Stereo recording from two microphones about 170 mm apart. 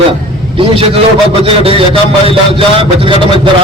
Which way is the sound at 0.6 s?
30° right (ahead or behind).